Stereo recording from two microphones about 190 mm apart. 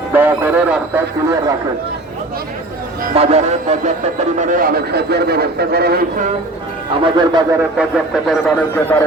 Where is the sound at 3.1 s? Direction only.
35° right (ahead or behind).